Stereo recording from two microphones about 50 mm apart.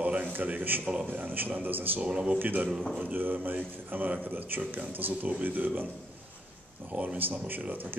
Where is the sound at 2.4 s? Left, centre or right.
Right.